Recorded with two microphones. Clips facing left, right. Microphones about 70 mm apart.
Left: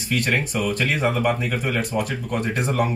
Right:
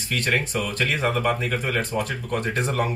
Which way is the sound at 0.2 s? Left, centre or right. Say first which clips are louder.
Right 1 dB; centre.